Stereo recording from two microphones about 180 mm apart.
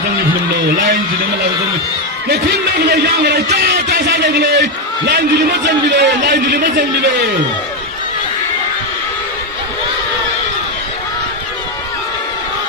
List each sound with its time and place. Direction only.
0.7 s speech: 70° right (ahead or behind)
2.2 s speech: 65° right (ahead or behind)